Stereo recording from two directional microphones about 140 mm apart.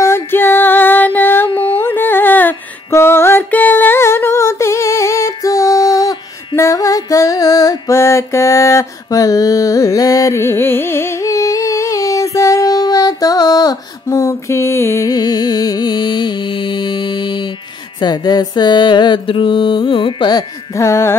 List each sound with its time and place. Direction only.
0.0 s music: 15° left (ahead or behind)
1.5 s music: 40° left (ahead or behind)
1.8 s music: 15° left (ahead or behind)